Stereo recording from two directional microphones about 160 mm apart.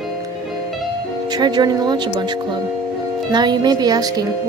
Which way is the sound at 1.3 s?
25° right (ahead or behind).